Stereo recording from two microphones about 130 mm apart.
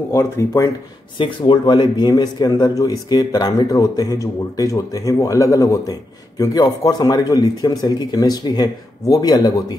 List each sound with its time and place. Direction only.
0.1 s a man's voice: 25° left (ahead or behind)
1.1 s a man's voice: 40° left (ahead or behind)